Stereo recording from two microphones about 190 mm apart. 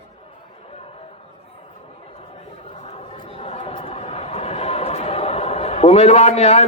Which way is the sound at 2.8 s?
30° left (ahead or behind).